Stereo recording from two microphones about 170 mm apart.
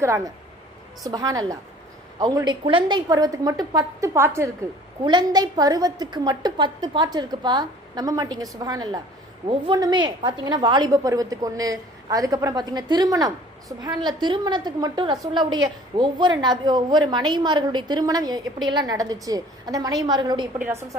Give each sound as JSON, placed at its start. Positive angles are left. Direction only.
{"t": 0.0, "sound": "a woman's voice", "side_deg": -15}